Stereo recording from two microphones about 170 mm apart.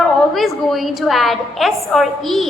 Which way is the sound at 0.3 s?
Centre (ahead or behind).